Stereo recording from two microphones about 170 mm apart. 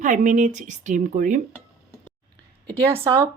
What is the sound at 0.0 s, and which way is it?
A woman's voice, 45° right (ahead or behind).